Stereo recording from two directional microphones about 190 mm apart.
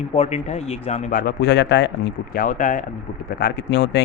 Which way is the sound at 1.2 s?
65° left (ahead or behind).